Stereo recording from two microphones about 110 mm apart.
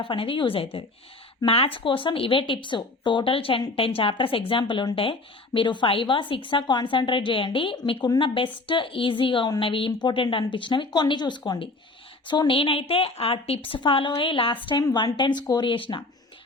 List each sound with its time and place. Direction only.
0.0 s a woman's voice: 50° left (ahead or behind)